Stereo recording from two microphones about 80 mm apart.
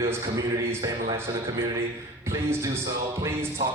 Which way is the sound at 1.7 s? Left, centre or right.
Right.